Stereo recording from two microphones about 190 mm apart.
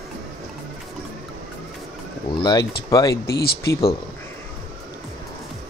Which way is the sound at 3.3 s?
55° left (ahead or behind).